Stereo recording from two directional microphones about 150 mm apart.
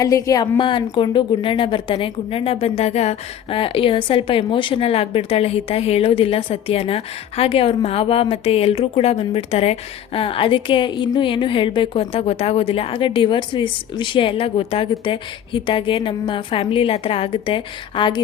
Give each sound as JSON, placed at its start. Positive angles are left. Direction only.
{"t": 0.0, "sound": "a woman's voice", "side_deg": 20}